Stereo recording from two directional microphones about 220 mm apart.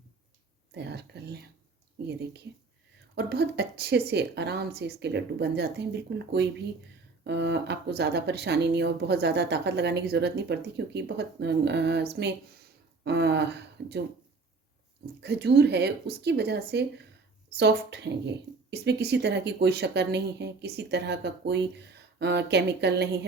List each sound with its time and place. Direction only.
0.7 s speech: 50° right (ahead or behind)
13.1 s speech: 50° right (ahead or behind)
15.0 s speech: 50° right (ahead or behind)